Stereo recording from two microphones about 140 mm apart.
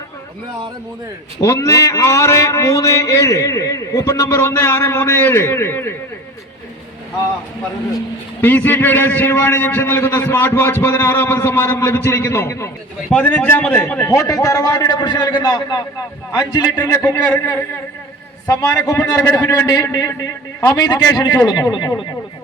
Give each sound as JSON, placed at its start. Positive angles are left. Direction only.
{"t": 1.4, "sound": "a man's voice", "side_deg": 20}
{"t": 8.4, "sound": "a man's voice", "side_deg": 15}
{"t": 13.1, "sound": "a man's voice", "side_deg": 10}
{"t": 14.1, "sound": "a man's voice", "side_deg": 20}
{"t": 19.6, "sound": "a man's voice", "side_deg": 25}